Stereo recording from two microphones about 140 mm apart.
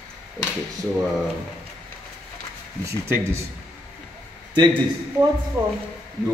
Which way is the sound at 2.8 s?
20° right (ahead or behind).